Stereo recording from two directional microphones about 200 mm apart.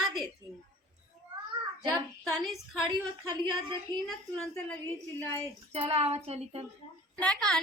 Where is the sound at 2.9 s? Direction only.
20° right (ahead or behind).